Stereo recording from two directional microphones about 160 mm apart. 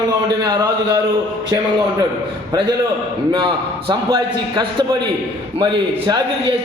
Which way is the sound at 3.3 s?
30° right (ahead or behind).